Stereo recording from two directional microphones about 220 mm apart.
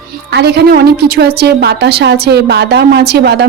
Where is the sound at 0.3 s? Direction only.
50° right (ahead or behind).